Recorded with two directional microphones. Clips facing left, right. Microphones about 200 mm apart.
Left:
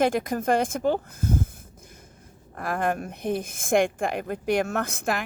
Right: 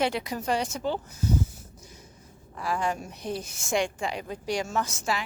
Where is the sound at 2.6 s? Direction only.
55° left (ahead or behind).